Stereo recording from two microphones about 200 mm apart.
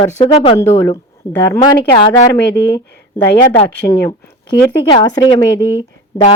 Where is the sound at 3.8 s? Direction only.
25° left (ahead or behind).